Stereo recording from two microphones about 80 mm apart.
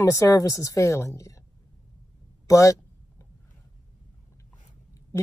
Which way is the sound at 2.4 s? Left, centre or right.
Left.